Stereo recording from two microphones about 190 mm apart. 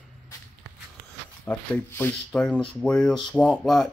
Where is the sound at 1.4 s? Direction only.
10° left (ahead or behind).